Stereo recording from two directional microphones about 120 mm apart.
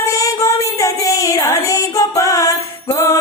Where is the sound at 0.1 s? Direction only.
25° left (ahead or behind).